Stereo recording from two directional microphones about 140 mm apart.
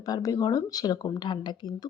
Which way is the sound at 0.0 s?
25° left (ahead or behind).